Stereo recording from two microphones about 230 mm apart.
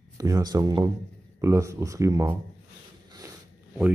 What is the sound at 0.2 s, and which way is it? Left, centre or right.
Speech, centre.